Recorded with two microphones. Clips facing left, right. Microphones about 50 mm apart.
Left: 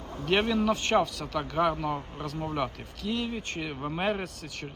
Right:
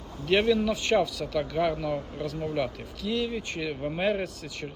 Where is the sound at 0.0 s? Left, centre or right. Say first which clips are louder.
Right 2 dB; left.